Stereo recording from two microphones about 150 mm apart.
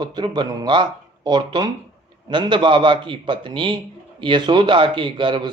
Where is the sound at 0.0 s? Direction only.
30° right (ahead or behind).